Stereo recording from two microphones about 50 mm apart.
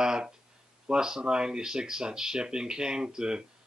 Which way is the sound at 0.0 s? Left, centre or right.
Centre.